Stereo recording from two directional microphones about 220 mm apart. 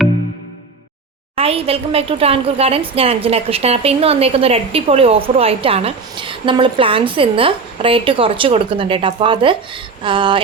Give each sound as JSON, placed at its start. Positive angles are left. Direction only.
{"t": 1.4, "sound": "a woman's voice", "side_deg": -25}